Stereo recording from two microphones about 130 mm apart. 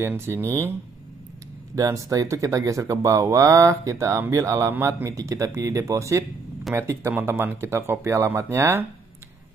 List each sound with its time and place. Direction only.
0.0 s speech: 20° right (ahead or behind)
1.8 s speech: 25° right (ahead or behind)